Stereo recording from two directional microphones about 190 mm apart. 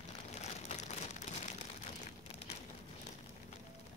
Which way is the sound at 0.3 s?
35° left (ahead or behind).